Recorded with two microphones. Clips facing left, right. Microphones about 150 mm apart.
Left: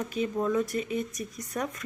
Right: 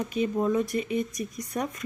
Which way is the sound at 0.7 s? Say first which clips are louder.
Right 3 dB; 35° left (ahead or behind).